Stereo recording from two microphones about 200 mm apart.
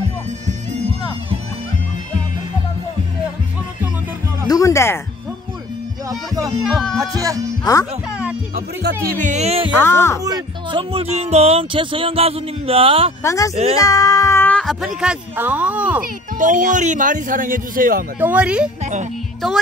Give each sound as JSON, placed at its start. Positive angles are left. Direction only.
{"t": 4.5, "sound": "music", "side_deg": 15}
{"t": 6.4, "sound": "speech", "side_deg": 0}
{"t": 7.0, "sound": "speech", "side_deg": -15}
{"t": 9.1, "sound": "speech", "side_deg": -40}
{"t": 9.8, "sound": "speech", "side_deg": 10}
{"t": 10.2, "sound": "speech", "side_deg": -20}
{"t": 13.2, "sound": "speech", "side_deg": 15}
{"t": 16.0, "sound": "speech", "side_deg": -40}
{"t": 18.2, "sound": "speech", "side_deg": -5}